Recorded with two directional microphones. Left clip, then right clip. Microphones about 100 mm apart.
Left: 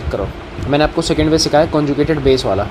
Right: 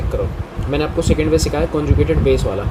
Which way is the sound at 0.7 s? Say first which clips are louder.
Left 4 dB; 20° left (ahead or behind).